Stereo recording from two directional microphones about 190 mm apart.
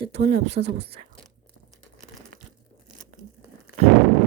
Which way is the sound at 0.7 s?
60° right (ahead or behind).